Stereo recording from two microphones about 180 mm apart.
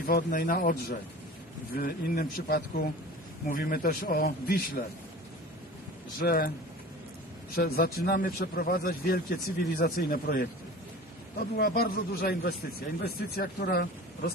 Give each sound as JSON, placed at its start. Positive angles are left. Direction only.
{"t": 0.0, "sound": "a man's voice", "side_deg": 50}
{"t": 6.1, "sound": "a man's voice", "side_deg": 55}
{"t": 7.5, "sound": "a man's voice", "side_deg": 55}